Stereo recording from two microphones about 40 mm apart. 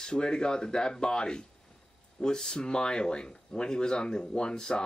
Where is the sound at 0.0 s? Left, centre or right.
Centre.